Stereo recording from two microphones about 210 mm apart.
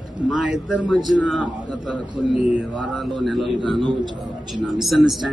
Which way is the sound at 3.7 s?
20° right (ahead or behind).